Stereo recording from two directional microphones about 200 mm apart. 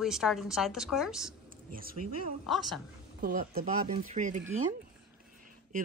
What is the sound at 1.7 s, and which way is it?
Speech, 45° right (ahead or behind).